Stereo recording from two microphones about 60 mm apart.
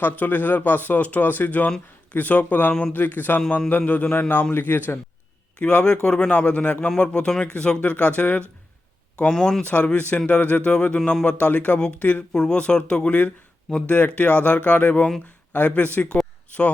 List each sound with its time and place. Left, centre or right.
0.0 s speech: left
5.5 s a man's voice: centre
9.3 s a man's voice: centre
9.6 s a man's voice: left